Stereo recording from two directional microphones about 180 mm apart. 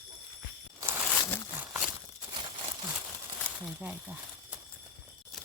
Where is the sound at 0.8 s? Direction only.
10° right (ahead or behind).